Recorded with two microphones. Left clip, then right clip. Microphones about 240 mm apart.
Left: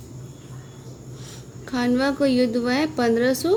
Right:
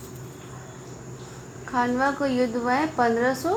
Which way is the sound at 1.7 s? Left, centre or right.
Left.